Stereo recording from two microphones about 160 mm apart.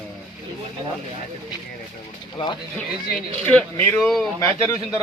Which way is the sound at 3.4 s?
10° left (ahead or behind).